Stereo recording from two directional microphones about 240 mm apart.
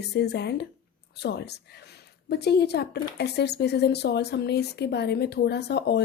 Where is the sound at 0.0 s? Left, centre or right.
Left.